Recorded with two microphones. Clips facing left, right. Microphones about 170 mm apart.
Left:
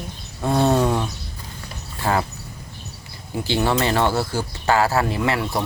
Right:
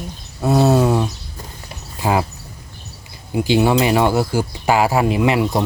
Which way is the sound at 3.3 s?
15° right (ahead or behind).